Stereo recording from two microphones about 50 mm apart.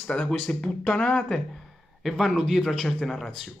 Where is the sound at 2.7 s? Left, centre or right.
Centre.